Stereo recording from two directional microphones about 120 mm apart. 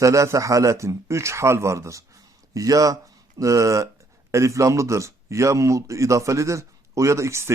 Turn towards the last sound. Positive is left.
turn(degrees=-25)  # may be behind; listen again after turning